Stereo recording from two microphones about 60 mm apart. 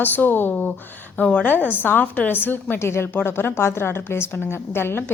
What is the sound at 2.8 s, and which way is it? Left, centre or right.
A woman's voice, left.